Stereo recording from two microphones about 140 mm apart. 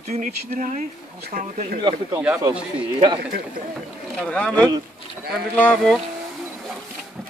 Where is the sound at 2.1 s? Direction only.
10° right (ahead or behind).